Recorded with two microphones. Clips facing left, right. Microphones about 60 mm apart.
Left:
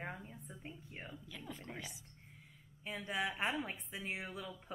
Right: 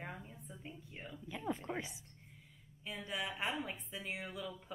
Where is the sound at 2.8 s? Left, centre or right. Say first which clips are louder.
Left 3 dB; left.